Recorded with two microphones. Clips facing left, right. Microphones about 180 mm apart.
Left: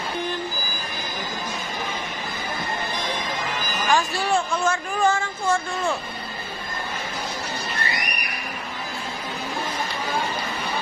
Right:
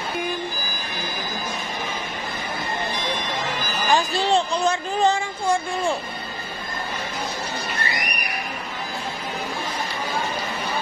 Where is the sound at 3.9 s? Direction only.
20° right (ahead or behind).